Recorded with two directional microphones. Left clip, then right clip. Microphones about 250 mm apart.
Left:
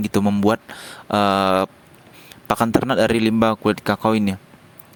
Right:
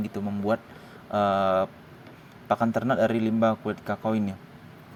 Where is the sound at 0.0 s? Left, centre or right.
Left.